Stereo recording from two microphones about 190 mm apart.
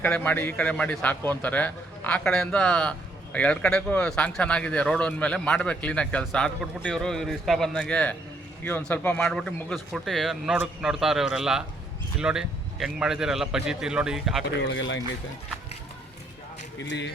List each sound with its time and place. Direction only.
0.0 s a man's voice: 10° left (ahead or behind)
14.6 s speech: 70° left (ahead or behind)
16.8 s speech: 70° left (ahead or behind)